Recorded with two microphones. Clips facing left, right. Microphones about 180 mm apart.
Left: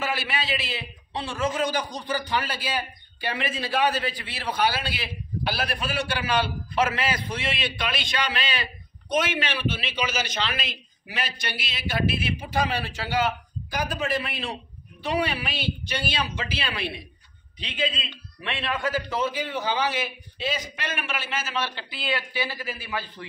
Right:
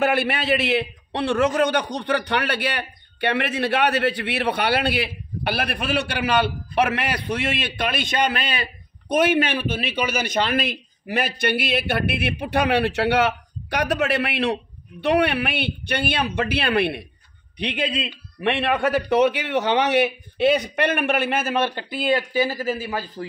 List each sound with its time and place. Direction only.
0.0 s a man's voice: 60° right (ahead or behind); by 23.2 s 40° right (ahead or behind)